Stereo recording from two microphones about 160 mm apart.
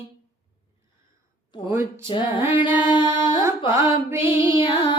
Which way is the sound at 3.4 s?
15° right (ahead or behind).